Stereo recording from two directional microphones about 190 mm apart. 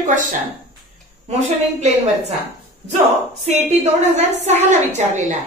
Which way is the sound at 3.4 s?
35° right (ahead or behind).